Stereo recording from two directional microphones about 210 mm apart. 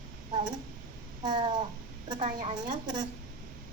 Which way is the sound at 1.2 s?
20° right (ahead or behind).